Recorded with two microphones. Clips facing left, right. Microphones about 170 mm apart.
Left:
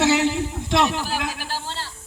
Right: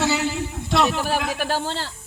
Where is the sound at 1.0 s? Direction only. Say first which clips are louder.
Right 5 dB; 60° right (ahead or behind).